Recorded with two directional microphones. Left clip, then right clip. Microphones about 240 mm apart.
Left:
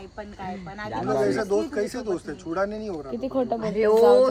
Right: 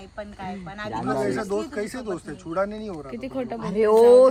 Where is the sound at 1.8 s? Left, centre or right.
Right.